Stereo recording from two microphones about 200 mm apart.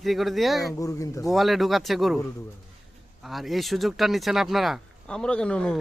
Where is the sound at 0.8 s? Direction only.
15° left (ahead or behind).